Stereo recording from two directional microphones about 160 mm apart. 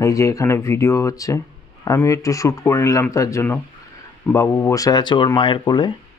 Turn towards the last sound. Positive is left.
turn(degrees=30)  # may be behind; listen again after turning